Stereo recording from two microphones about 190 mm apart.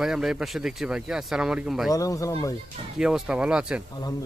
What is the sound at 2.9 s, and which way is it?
Speech, 5° right (ahead or behind).